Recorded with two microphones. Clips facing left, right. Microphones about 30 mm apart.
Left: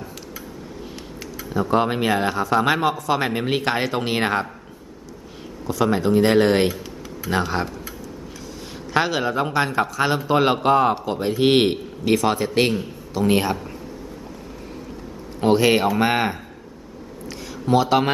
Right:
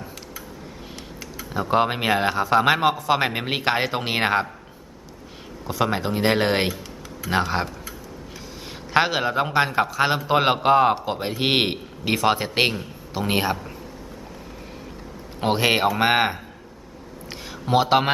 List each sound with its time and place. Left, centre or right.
1.5 s speech: centre
5.6 s speech: centre
8.9 s speech: centre
13.1 s speech: centre
15.4 s speech: centre
17.7 s speech: right